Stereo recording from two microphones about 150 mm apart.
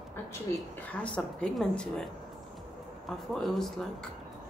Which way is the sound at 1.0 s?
5° left (ahead or behind).